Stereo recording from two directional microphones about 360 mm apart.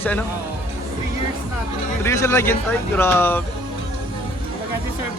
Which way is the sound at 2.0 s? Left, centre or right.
Centre.